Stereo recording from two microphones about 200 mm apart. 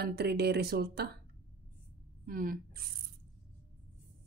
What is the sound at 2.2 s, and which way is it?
Speech, 45° right (ahead or behind).